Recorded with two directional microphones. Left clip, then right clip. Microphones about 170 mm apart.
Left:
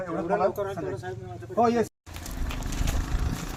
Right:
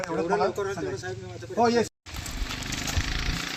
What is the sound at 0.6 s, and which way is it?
Speech, 40° left (ahead or behind).